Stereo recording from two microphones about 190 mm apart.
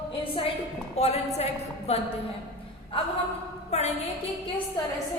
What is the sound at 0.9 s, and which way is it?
A woman's voice, 35° left (ahead or behind).